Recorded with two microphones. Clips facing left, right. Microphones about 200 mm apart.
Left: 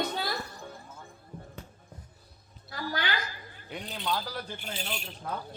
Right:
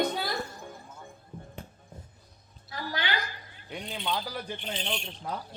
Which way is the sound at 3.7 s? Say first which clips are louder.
Even; centre (ahead or behind).